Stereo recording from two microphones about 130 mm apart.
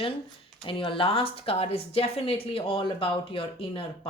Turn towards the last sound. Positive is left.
turn(degrees=40)  # may be behind; listen again after turning